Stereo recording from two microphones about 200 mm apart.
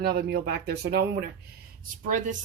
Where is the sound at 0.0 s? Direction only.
50° right (ahead or behind).